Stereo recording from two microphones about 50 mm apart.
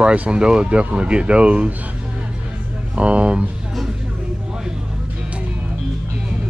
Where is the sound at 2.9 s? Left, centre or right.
Right.